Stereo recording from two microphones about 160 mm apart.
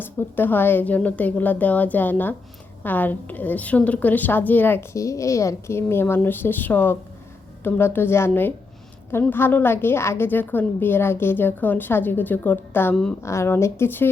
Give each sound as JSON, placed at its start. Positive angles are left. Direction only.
{"t": 0.0, "sound": "a woman's voice", "side_deg": 15}